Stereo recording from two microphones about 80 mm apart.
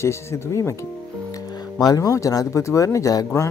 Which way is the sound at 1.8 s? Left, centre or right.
Left.